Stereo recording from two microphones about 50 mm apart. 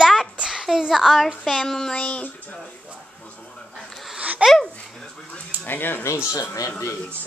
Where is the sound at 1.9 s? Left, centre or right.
Left.